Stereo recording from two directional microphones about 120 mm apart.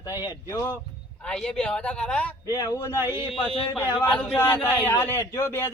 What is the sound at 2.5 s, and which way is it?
Speech, 30° left (ahead or behind).